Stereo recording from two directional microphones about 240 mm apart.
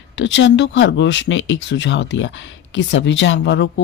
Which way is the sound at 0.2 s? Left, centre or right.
Left.